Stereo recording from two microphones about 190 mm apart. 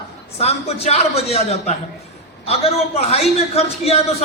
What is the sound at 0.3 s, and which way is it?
A man's voice, 35° left (ahead or behind).